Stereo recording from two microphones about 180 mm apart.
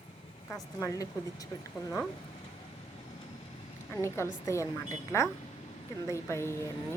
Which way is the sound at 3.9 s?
15° left (ahead or behind).